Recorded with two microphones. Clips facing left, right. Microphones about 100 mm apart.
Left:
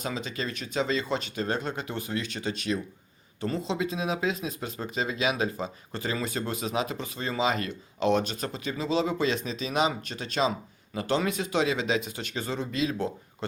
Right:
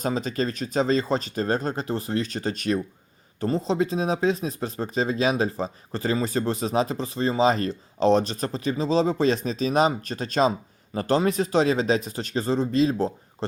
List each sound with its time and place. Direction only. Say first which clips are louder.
0.0 s speech: right 7 dB; 40° right (ahead or behind)